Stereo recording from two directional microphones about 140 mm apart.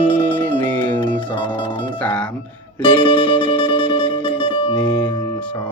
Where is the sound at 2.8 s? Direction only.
35° left (ahead or behind).